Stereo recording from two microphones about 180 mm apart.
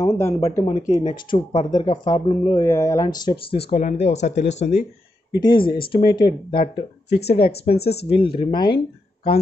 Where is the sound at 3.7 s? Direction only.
40° left (ahead or behind).